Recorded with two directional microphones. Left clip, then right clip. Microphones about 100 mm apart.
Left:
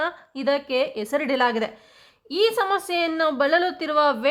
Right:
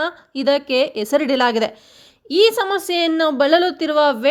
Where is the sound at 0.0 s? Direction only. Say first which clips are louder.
Right 5 dB; 40° right (ahead or behind).